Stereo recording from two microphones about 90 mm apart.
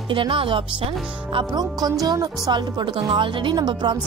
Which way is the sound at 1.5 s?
45° right (ahead or behind).